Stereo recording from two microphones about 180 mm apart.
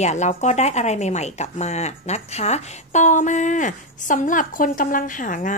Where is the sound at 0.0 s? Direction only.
40° left (ahead or behind).